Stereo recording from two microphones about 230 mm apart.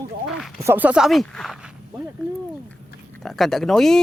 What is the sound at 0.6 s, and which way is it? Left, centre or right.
Speech, centre.